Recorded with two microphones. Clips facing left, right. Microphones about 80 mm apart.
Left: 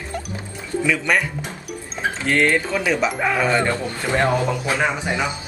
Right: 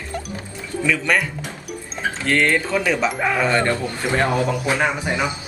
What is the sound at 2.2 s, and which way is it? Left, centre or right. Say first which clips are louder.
Speech: even; centre.